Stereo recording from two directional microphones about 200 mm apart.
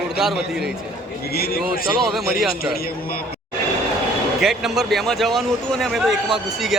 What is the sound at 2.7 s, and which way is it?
Speech, 50° left (ahead or behind).